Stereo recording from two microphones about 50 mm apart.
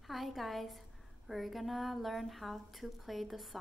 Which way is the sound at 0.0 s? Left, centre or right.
Centre.